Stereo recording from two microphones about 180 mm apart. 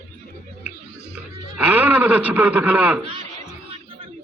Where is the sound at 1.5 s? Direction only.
10° right (ahead or behind).